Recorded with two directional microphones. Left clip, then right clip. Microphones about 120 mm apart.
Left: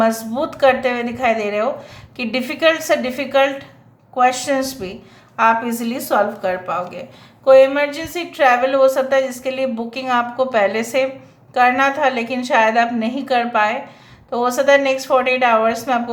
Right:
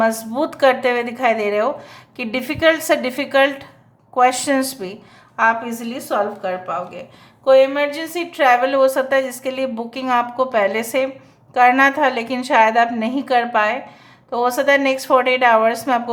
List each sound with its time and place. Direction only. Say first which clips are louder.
0.0 s a woman's voice: even; 25° right (ahead or behind)
5.6 s a woman's voice: left 3 dB; centre (ahead or behind)
7.4 s a woman's voice: left 2 dB; 20° right (ahead or behind)